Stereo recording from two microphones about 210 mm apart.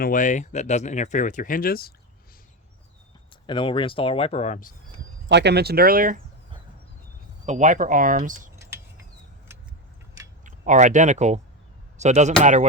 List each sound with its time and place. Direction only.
0.0 s speech: 40° left (ahead or behind)
3.4 s speech: 25° left (ahead or behind)
5.3 s speech: 55° right (ahead or behind)
7.4 s speech: 35° right (ahead or behind)
10.4 s speech: 35° right (ahead or behind)